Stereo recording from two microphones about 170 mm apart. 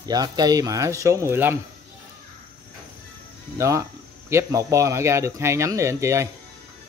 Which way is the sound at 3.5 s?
20° right (ahead or behind).